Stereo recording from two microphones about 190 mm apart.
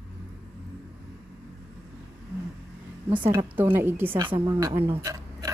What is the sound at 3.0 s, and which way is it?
A woman's voice, 10° right (ahead or behind).